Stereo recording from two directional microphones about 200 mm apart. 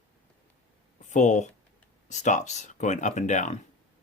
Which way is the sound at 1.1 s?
35° left (ahead or behind).